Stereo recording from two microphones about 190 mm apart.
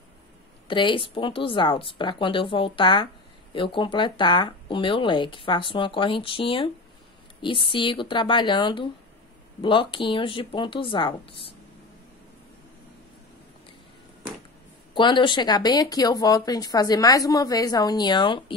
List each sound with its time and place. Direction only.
0.7 s speech: 25° left (ahead or behind)
15.0 s speech: 25° left (ahead or behind)